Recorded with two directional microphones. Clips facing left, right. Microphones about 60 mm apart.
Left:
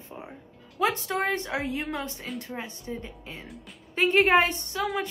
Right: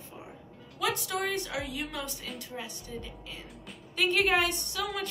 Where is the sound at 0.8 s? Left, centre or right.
Left.